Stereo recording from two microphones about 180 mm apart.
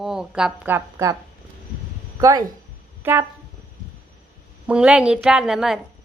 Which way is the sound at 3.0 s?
10° right (ahead or behind).